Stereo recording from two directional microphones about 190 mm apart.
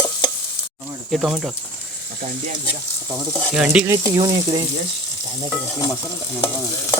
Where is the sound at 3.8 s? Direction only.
20° right (ahead or behind).